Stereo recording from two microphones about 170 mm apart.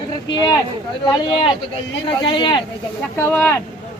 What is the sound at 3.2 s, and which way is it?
Speech, 10° left (ahead or behind).